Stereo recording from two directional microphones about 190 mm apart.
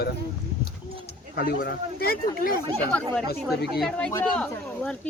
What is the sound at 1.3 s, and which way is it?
Speech, 50° left (ahead or behind).